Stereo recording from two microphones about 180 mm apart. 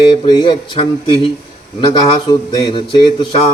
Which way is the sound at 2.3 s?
25° left (ahead or behind).